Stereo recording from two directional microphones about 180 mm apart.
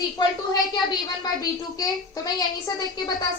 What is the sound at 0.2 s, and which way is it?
A woman's voice, 25° left (ahead or behind).